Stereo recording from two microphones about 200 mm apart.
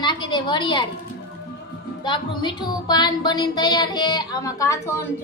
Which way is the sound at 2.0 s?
25° left (ahead or behind).